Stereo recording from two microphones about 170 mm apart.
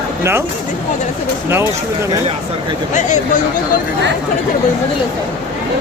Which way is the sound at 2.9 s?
45° left (ahead or behind).